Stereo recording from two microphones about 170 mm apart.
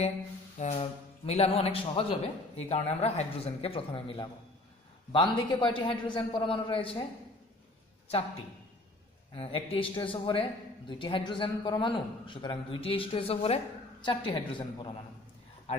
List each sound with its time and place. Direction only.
0.6 s a man's voice: 40° left (ahead or behind)
9.3 s a man's voice: 35° left (ahead or behind)